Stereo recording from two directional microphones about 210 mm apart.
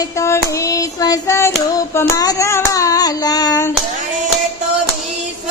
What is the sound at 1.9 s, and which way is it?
Hands, 15° left (ahead or behind).